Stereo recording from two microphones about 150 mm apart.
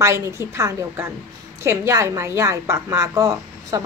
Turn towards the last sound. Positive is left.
turn(degrees=-20)  # may be behind; listen again after turning